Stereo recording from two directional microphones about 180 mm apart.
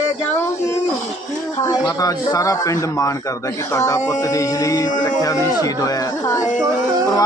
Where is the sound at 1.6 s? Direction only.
20° left (ahead or behind).